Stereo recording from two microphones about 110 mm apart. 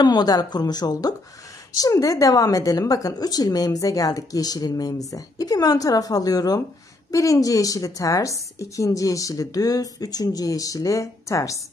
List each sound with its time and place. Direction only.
0.0 s a woman's voice: 40° left (ahead or behind)